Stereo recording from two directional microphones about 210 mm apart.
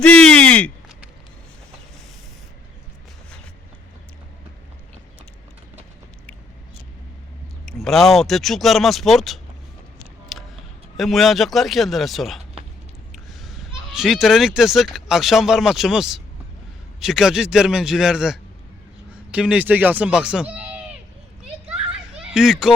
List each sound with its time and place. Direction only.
0.0 s a sound: 5° left (ahead or behind)
7.6 s speech: centre (ahead or behind)
10.3 s music: centre (ahead or behind)
10.9 s speech: centre (ahead or behind)
13.4 s speech: centre (ahead or behind)
21.7 s children playing: 5° right (ahead or behind)